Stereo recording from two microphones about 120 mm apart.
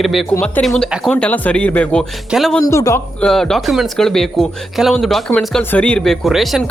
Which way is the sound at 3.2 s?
5° left (ahead or behind).